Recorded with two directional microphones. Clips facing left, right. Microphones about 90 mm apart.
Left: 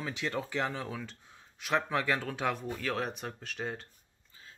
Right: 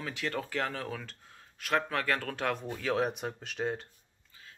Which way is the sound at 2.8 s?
5° right (ahead or behind).